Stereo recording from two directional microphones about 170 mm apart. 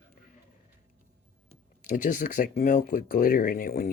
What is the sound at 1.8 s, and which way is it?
Speech, 50° left (ahead or behind).